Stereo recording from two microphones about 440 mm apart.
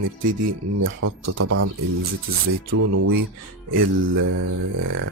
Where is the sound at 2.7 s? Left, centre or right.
Right.